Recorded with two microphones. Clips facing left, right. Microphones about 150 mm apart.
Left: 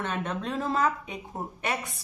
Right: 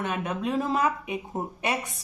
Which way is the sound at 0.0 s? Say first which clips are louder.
Right 2 dB; 10° right (ahead or behind).